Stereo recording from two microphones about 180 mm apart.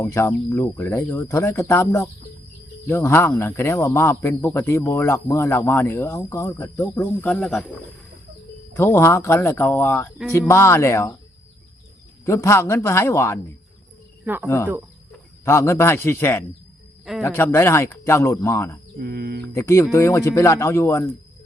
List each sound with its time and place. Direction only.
0.0 s speech: 15° left (ahead or behind)
8.7 s speech: 15° left (ahead or behind)
12.2 s speech: 15° left (ahead or behind)
14.4 s speech: 15° left (ahead or behind)
18.9 s mantra: 60° right (ahead or behind)
19.5 s speech: 15° left (ahead or behind)